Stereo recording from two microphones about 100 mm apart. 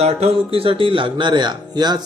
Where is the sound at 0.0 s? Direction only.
85° right.